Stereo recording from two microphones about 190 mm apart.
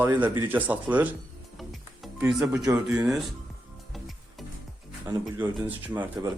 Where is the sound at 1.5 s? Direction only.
Centre (ahead or behind).